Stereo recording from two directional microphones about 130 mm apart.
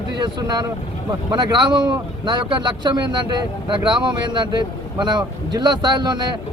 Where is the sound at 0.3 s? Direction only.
35° right (ahead or behind).